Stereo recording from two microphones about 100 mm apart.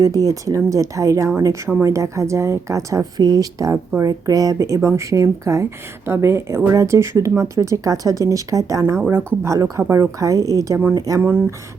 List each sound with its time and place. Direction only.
0.0 s a woman's voice: 35° right (ahead or behind)